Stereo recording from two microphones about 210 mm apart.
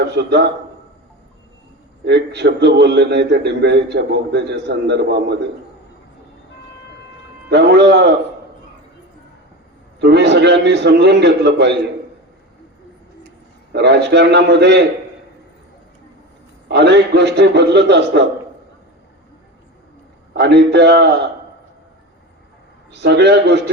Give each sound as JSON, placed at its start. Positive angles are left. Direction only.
{"t": 0.0, "sound": "a man's voice", "side_deg": -55}
{"t": 2.0, "sound": "a man's voice", "side_deg": -55}
{"t": 7.5, "sound": "a man's voice", "side_deg": -55}
{"t": 10.0, "sound": "a man's voice", "side_deg": -50}
{"t": 13.7, "sound": "a man's voice", "side_deg": -55}
{"t": 16.6, "sound": "a man's voice", "side_deg": -55}
{"t": 20.3, "sound": "a man's voice", "side_deg": -55}
{"t": 22.9, "sound": "a man's voice", "side_deg": -55}